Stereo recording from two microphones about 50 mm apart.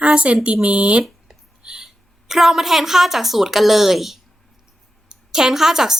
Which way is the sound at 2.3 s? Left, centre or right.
Centre.